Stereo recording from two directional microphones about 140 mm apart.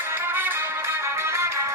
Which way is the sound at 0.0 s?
15° right (ahead or behind).